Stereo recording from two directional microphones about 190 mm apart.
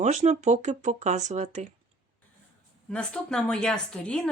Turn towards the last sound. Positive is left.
turn(degrees=5)  # may be behind; listen again after turning